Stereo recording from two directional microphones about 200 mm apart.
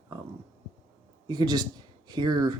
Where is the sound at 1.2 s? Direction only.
20° right (ahead or behind).